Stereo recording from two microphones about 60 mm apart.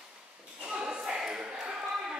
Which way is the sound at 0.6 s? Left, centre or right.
Centre.